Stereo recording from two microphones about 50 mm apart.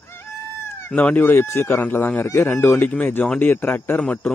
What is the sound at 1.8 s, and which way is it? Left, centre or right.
Speech, left.